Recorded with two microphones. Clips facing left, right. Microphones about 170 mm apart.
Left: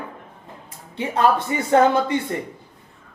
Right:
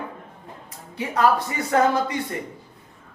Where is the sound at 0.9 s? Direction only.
25° left (ahead or behind).